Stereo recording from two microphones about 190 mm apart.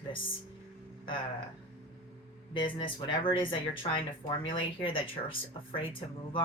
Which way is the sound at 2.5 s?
25° left (ahead or behind).